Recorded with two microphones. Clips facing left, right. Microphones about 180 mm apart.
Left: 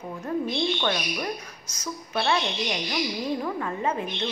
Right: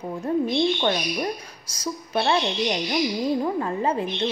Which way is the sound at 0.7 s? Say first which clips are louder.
Right 3 dB; 30° right (ahead or behind).